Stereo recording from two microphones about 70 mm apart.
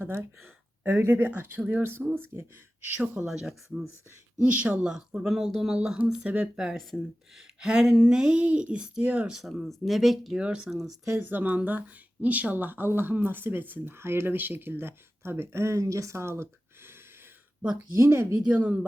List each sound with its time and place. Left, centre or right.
0.0 s speech: right
3.2 s speech: centre
4.4 s speech: centre
6.2 s speech: centre
6.6 s speech: centre
9.4 s speech: centre
10.3 s speech: centre
11.3 s speech: right
17.6 s speech: centre
17.9 s speech: right
18.4 s speech: centre